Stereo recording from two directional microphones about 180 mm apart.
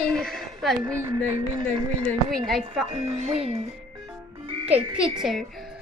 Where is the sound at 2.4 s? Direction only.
Centre (ahead or behind).